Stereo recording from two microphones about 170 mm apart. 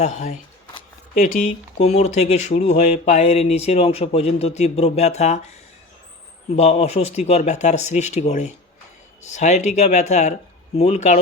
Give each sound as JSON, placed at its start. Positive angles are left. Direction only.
{"t": 0.0, "sound": "speech", "side_deg": 45}
{"t": 1.8, "sound": "speech", "side_deg": 40}
{"t": 6.6, "sound": "speech", "side_deg": 40}